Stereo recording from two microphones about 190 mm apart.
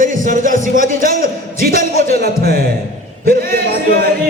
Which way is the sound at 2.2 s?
55° right (ahead or behind).